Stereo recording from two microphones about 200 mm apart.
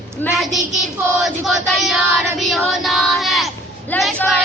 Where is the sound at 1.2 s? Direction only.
Centre (ahead or behind).